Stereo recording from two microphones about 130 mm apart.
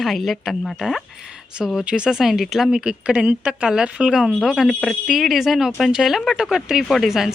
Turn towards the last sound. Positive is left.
turn(degrees=0)  # may be behind; listen again after turning